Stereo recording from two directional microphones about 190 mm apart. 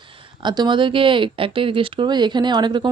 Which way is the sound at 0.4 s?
25° right (ahead or behind).